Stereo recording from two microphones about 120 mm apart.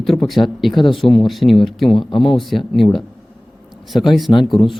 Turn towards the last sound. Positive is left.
turn(degrees=0)  # may be behind; listen again after turning